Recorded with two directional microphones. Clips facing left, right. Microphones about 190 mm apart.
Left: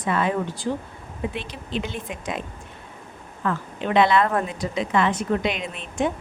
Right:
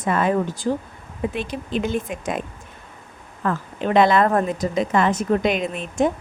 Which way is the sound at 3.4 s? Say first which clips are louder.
Right 3 dB; 40° right (ahead or behind).